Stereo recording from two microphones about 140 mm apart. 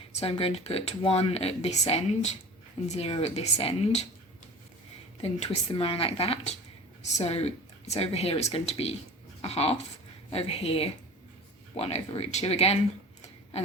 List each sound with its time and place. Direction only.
0.1 s speech: 45° left (ahead or behind)
2.8 s speech: 50° left (ahead or behind)
5.2 s speech: 45° left (ahead or behind)